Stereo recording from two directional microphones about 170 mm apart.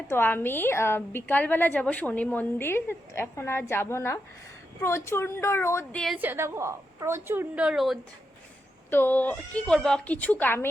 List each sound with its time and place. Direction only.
0.1 s a woman's voice: 15° left (ahead or behind)
6.1 s a woman's voice: 10° right (ahead or behind)
8.9 s a woman's voice: 10° left (ahead or behind)